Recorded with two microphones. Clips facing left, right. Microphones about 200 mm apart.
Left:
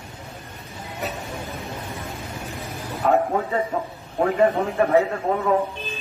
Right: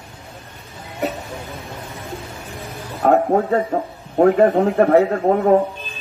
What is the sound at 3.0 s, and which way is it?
A man's voice, 50° right (ahead or behind).